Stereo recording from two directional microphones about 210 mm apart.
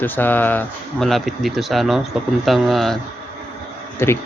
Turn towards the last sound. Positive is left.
turn(degrees=10)  # may be behind; listen again after turning